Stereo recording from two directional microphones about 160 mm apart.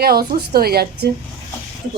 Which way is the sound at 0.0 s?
75° right (ahead or behind).